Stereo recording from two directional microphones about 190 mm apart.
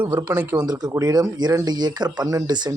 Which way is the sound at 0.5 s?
20° right (ahead or behind).